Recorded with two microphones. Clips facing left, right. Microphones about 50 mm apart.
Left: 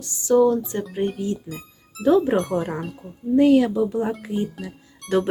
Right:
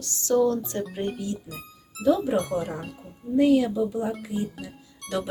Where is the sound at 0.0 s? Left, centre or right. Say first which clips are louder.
Left 5 dB; centre.